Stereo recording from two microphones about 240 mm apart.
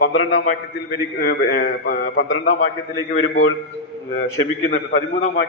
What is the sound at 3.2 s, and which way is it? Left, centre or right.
Speech, left.